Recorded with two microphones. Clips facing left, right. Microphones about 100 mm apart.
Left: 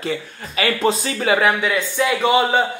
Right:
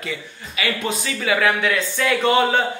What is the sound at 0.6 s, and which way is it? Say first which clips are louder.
Speech: left 5 dB; 35° left (ahead or behind).